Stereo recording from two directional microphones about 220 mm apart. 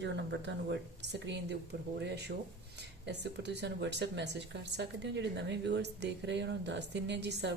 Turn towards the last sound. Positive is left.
turn(degrees=-50)  # may be behind; listen again after turning